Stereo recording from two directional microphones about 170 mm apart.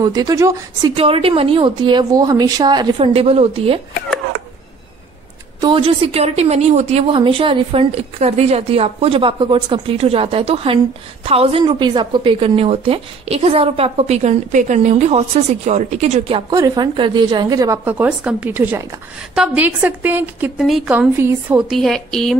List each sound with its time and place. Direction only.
0.0 s a woman's voice: 20° right (ahead or behind)
0.9 s a woman's voice: 35° right (ahead or behind)
5.6 s a woman's voice: 30° right (ahead or behind)
16.5 s a woman's voice: 25° right (ahead or behind); by 22.4 s centre (ahead or behind)